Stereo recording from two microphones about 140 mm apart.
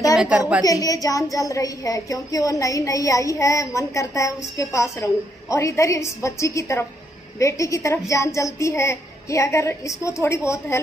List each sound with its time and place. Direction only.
0.7 s speech: 25° left (ahead or behind)